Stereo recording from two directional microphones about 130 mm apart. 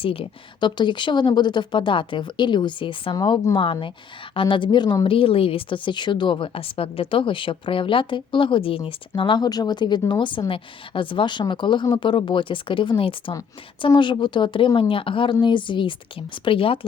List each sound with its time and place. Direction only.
0.0 s a woman's voice: 45° left (ahead or behind)